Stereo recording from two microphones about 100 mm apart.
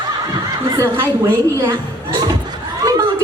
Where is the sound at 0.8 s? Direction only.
30° right (ahead or behind).